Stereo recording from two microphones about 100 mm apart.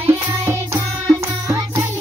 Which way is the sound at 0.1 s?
20° right (ahead or behind).